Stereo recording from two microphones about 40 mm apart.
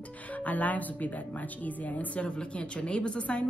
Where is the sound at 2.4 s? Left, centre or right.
Left.